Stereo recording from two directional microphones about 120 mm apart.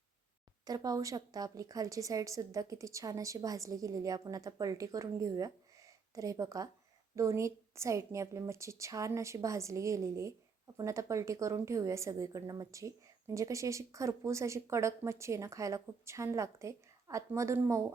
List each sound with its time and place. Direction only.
0.6 s a woman's voice: 30° right (ahead or behind)